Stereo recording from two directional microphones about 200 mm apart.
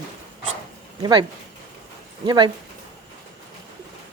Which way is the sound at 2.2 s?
25° right (ahead or behind).